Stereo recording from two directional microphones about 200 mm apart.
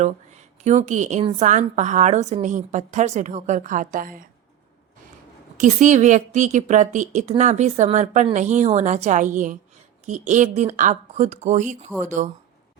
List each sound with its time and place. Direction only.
0.0 s a woman's voice: 35° right (ahead or behind)
1.5 s a woman's voice: 40° right (ahead or behind)
5.5 s a woman's voice: 40° right (ahead or behind)